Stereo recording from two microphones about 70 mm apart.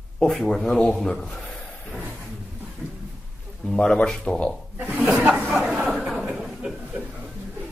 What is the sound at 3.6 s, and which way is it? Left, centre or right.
Speech, centre.